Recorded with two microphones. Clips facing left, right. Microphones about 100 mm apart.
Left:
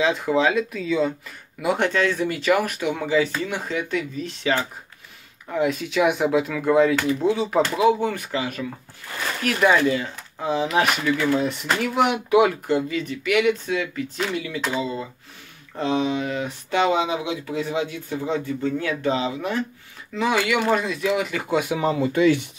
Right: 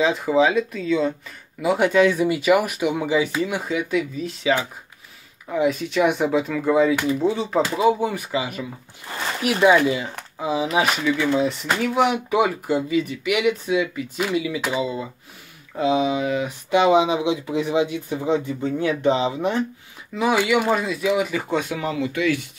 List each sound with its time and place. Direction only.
0.0 s speech: centre (ahead or behind)
1.9 s speech: 10° right (ahead or behind)
11.1 s speech: 15° right (ahead or behind)
11.4 s speech: centre (ahead or behind); by 19.6 s 25° right (ahead or behind)
20.2 s speech: 10° right (ahead or behind)
21.5 s speech: 15° left (ahead or behind)
21.8 s speech: 35° left (ahead or behind)